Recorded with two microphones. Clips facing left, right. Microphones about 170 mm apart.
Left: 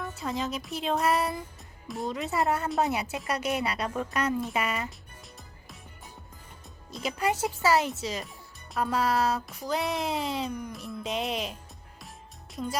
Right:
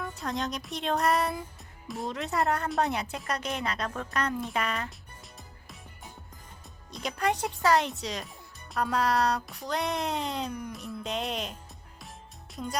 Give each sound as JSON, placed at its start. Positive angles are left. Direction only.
{"t": 0.2, "sound": "music", "side_deg": 0}
{"t": 1.9, "sound": "speech", "side_deg": 0}
{"t": 6.9, "sound": "music", "side_deg": 5}
{"t": 12.6, "sound": "music", "side_deg": 0}